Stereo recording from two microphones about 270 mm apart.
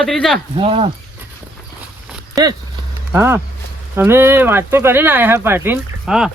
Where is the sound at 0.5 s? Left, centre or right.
Right.